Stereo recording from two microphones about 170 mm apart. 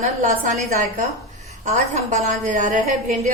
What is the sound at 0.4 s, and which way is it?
A woman's voice, 45° right (ahead or behind).